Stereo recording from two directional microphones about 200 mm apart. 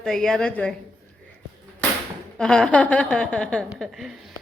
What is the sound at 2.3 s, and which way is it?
Speech, 5° left (ahead or behind).